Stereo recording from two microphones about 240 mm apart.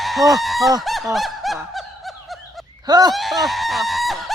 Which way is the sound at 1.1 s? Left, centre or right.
Centre.